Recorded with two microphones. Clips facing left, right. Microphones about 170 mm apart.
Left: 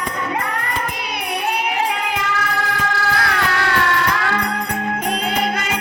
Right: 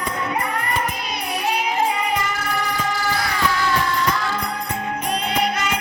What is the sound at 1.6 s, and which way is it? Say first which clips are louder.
Music: even; 75° left (ahead or behind).